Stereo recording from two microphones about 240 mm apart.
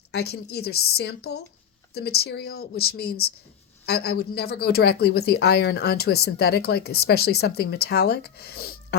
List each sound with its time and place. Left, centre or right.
0.1 s speech: left